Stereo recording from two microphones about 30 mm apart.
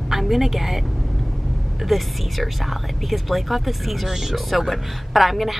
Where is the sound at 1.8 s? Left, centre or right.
Centre.